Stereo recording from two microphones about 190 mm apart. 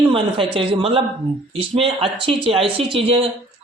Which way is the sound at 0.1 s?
30° right (ahead or behind).